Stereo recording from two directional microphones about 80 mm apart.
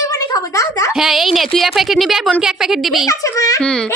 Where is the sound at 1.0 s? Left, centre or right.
Centre.